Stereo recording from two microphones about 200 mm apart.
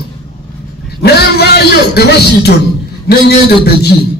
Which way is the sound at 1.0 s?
50° left (ahead or behind).